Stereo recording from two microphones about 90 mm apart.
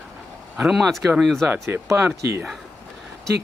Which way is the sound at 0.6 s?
Centre (ahead or behind).